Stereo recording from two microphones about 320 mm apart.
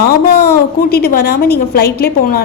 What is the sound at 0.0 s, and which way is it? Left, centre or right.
A woman's voice, left.